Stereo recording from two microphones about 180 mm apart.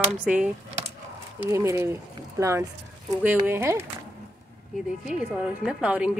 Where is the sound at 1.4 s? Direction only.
15° right (ahead or behind).